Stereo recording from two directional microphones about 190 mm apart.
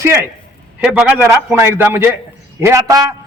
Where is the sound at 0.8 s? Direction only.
5° right (ahead or behind).